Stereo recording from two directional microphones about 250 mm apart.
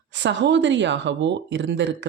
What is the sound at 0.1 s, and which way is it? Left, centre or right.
Speech, right.